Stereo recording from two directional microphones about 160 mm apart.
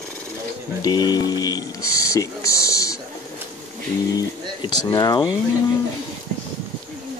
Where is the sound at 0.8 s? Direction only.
25° left (ahead or behind).